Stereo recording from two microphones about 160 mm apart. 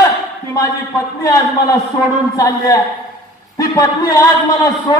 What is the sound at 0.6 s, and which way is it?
A man's voice, 20° left (ahead or behind).